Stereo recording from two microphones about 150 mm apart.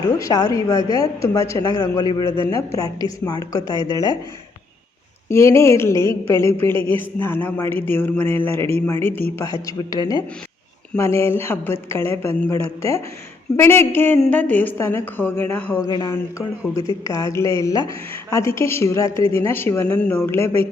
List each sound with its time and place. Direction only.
0.2 s speech: 20° left (ahead or behind)
5.3 s a man's voice: 20° left (ahead or behind)
15.8 s a man's voice: 30° left (ahead or behind)